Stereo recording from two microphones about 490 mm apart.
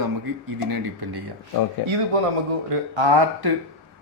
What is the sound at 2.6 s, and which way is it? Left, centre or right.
Speech, right.